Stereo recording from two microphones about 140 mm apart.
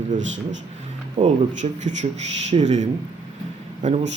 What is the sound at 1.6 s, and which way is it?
Speech, 55° right (ahead or behind).